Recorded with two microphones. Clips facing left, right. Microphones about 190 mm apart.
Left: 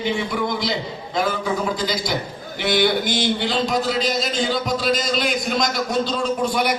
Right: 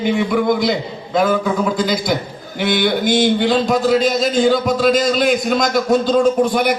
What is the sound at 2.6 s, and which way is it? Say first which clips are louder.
Speech: right 3 dB; 50° right (ahead or behind).